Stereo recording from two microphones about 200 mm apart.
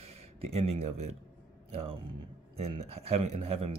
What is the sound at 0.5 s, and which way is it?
Speech, 30° right (ahead or behind).